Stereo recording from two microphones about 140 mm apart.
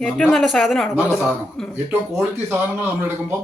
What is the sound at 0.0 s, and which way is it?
Speech, 5° left (ahead or behind).